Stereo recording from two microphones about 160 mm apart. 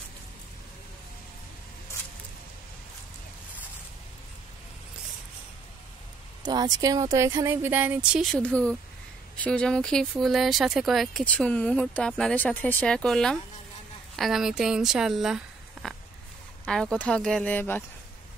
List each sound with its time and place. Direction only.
6.4 s speech: 25° right (ahead or behind); by 17.8 s 10° left (ahead or behind)